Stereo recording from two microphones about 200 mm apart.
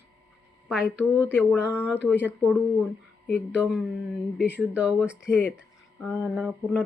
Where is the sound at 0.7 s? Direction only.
5° right (ahead or behind).